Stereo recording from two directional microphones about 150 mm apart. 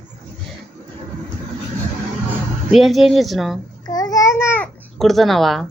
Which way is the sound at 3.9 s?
25° left (ahead or behind).